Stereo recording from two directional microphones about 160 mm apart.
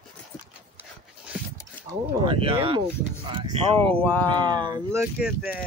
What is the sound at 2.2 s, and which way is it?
Speech, 35° right (ahead or behind).